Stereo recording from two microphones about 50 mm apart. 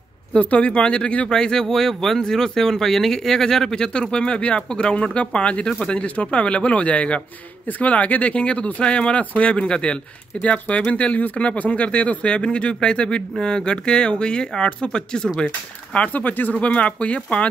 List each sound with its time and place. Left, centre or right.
0.4 s speech: left
1.3 s speech: centre; by 16.5 s left
16.5 s speech: left